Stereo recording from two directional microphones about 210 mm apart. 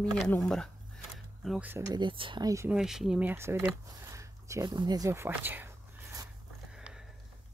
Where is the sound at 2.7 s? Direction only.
Centre (ahead or behind).